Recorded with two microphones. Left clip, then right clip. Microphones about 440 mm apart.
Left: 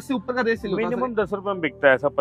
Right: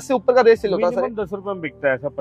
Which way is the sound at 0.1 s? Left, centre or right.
Right.